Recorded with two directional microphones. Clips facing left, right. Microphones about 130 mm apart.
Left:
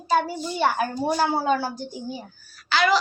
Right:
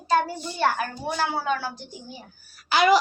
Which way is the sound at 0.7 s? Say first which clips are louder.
Left 5 dB; 40° left (ahead or behind).